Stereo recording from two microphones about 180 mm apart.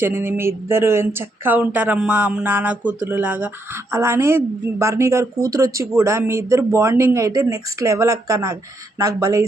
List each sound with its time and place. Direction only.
0.0 s speech: 10° right (ahead or behind)